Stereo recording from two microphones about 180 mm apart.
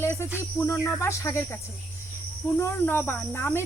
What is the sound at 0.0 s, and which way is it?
Cricket, 15° left (ahead or behind).